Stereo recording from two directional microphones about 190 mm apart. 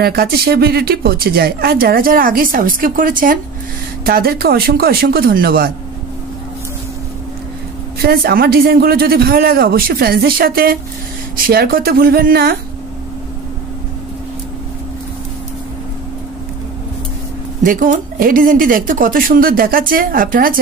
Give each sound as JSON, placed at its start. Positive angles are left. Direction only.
{"t": 0.0, "sound": "a woman's voice", "side_deg": -55}
{"t": 8.0, "sound": "a woman's voice", "side_deg": -55}
{"t": 17.6, "sound": "a woman's voice", "side_deg": -45}